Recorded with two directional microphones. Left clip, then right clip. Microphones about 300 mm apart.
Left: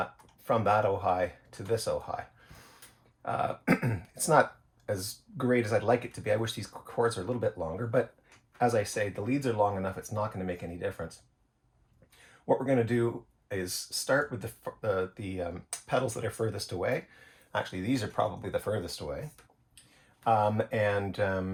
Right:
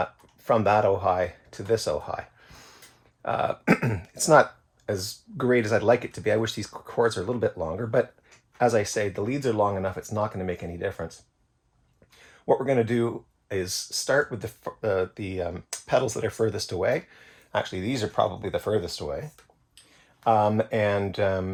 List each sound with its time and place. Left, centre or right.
0.4 s speech: right
3.2 s speech: right
12.5 s speech: right
14.3 s speech: right
20.2 s speech: right